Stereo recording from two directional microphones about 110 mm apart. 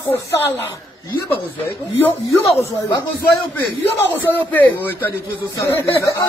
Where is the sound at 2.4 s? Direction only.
30° left (ahead or behind).